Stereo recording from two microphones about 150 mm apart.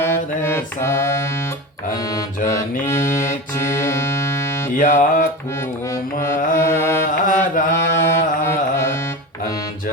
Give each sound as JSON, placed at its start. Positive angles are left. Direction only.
{"t": 0.0, "sound": "mantra", "side_deg": 15}
{"t": 2.0, "sound": "music", "side_deg": 25}
{"t": 4.7, "sound": "music", "side_deg": 65}
{"t": 6.6, "sound": "carnatic music", "side_deg": 15}
{"t": 7.3, "sound": "carnatic music", "side_deg": 65}
{"t": 7.8, "sound": "carnatic music", "side_deg": 15}